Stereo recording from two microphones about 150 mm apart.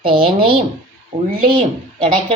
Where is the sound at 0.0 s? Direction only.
35° right (ahead or behind).